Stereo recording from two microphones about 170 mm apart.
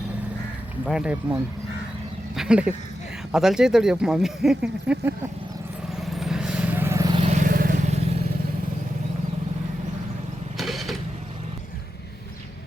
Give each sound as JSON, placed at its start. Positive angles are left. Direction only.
{"t": 0.9, "sound": "speech", "side_deg": -5}
{"t": 6.0, "sound": "vehicle", "side_deg": 0}
{"t": 7.2, "sound": "vehicle", "side_deg": -45}
{"t": 10.6, "sound": "vehicle", "side_deg": 0}